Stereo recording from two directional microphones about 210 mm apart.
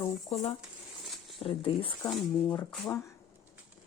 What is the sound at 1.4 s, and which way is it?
Speech, 25° left (ahead or behind).